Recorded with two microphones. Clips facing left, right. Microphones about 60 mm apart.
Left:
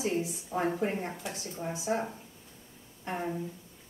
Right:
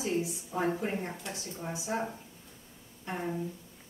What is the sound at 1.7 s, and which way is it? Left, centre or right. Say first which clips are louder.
Speech: left 3 dB; left.